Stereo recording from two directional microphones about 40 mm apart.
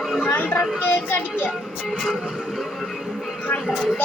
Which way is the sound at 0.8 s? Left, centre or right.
Left.